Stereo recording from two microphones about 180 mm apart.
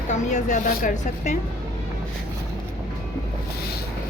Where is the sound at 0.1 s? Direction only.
40° left (ahead or behind).